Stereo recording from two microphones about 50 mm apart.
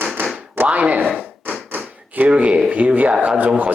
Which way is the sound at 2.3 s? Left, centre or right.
Right.